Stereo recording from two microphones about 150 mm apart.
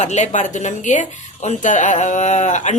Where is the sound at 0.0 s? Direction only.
50° left (ahead or behind).